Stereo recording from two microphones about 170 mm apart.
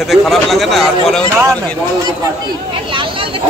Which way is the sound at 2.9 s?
30° right (ahead or behind).